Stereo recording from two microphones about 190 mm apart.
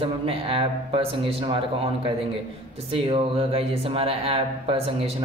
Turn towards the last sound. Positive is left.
turn(degrees=-30)  # may be behind; listen again after turning